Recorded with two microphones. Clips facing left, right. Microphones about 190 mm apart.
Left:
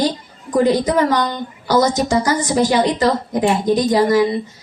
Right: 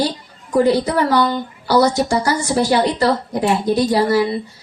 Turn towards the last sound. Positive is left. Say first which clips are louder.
# left 2 dB
turn(degrees=20)  # may be behind; listen again after turning